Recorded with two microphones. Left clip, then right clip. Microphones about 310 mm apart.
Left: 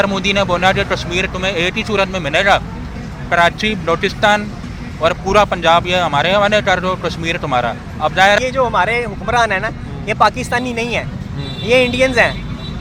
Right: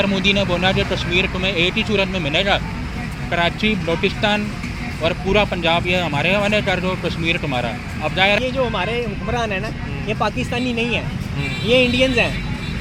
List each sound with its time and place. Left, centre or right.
0.0 s speech: left